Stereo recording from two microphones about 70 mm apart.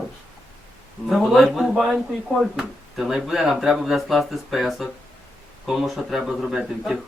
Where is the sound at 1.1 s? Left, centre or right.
Centre.